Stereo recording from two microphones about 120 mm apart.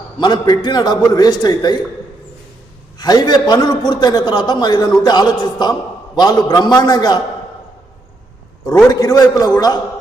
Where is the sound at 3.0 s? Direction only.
35° left (ahead or behind).